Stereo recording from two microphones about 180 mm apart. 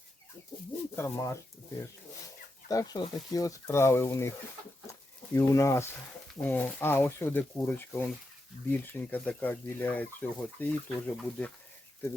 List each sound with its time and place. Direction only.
0.9 s speech: 15° left (ahead or behind)
2.6 s speech: 20° left (ahead or behind)
5.3 s speech: 15° left (ahead or behind)